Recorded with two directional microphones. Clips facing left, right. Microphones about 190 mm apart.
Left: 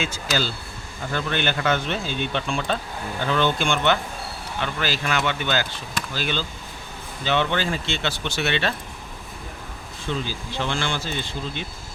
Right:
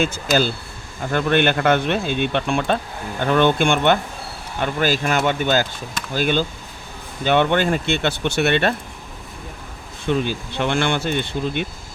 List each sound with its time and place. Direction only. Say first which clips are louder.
0.0 s speech: right 7 dB; 50° right (ahead or behind)
10.1 s speech: right 7 dB; 60° right (ahead or behind)